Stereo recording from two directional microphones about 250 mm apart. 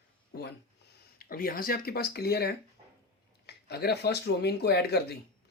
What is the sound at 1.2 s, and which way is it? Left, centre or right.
Speech, left.